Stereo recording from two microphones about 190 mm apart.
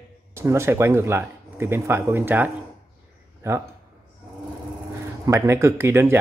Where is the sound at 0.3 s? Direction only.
15° right (ahead or behind).